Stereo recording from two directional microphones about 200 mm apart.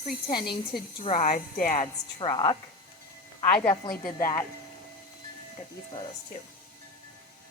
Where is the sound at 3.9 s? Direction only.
45° left (ahead or behind).